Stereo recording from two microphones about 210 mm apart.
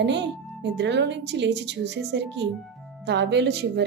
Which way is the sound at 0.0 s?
55° right (ahead or behind).